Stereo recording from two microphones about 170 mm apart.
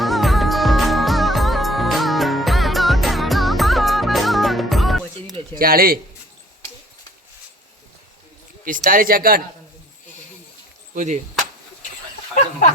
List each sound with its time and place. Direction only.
0.0 s music: centre (ahead or behind)
5.5 s speech: 60° right (ahead or behind)
8.6 s speech: 50° right (ahead or behind)
10.9 s speech: 45° right (ahead or behind)